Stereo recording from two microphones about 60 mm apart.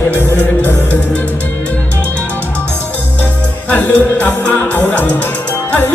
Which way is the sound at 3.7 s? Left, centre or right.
Left.